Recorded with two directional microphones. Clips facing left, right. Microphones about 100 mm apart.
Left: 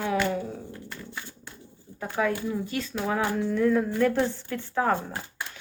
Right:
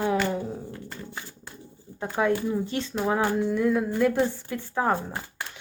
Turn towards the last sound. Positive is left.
turn(degrees=-15)  # may be behind; listen again after turning